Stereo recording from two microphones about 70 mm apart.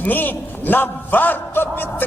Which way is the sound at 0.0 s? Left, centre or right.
Left.